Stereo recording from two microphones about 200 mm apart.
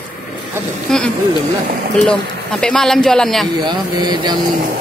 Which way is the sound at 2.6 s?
Centre (ahead or behind).